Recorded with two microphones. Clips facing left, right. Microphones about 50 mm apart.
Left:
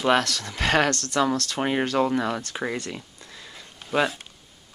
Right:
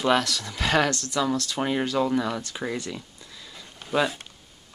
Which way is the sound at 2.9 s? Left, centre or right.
Left.